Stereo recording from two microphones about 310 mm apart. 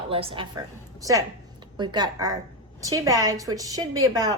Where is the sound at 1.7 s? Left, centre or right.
Centre.